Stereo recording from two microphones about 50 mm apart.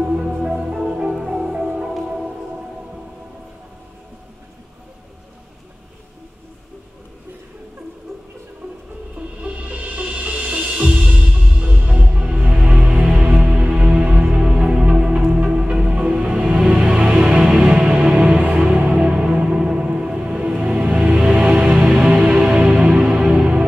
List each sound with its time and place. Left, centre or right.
0.0 s music: right
0.4 s music: centre
9.4 s music: right